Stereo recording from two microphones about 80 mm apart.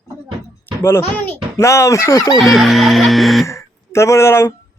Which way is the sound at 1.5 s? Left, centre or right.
Left.